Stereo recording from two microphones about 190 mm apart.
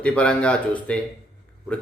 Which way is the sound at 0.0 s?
5° left (ahead or behind).